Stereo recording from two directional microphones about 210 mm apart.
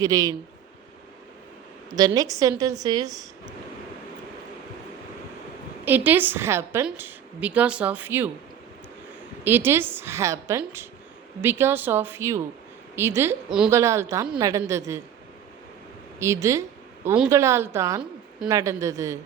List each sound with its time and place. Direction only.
0.0 s speech: 15° right (ahead or behind)
1.9 s speech: 20° right (ahead or behind)
5.8 s speech: 10° right (ahead or behind)
9.4 s speech: 10° right (ahead or behind)
16.1 s a woman's voice: 15° right (ahead or behind)